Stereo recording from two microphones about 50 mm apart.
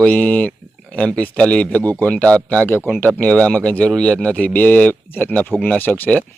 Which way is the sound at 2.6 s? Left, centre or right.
Left.